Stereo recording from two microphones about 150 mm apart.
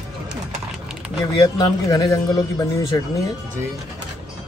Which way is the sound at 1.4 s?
25° left (ahead or behind).